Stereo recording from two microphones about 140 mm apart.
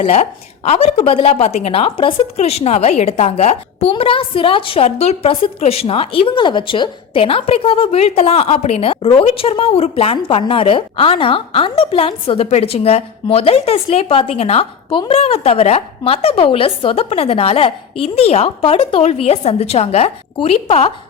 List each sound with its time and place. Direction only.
0.0 s a woman's voice: 50° left (ahead or behind)